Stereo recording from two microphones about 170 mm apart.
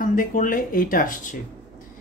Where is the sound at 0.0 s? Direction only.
55° left (ahead or behind).